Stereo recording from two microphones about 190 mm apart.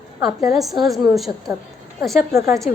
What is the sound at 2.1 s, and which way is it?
Speech, 15° right (ahead or behind).